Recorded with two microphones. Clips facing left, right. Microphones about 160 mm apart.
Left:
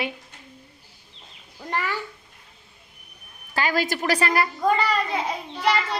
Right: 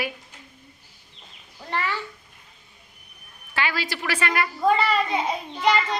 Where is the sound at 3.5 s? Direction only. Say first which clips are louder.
Left 4 dB; 45° left (ahead or behind).